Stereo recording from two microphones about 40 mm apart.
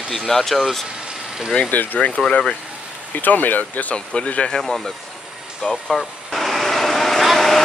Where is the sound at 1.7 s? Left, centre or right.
Left.